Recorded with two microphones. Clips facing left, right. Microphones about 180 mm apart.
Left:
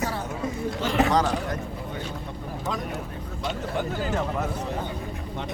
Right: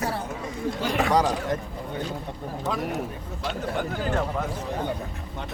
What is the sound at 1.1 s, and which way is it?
Speech, 10° right (ahead or behind).